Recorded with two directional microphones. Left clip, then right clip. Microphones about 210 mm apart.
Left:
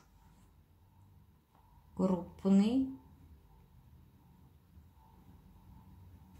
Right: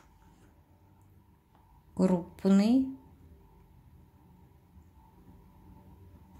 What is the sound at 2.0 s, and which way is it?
Speech, 40° right (ahead or behind).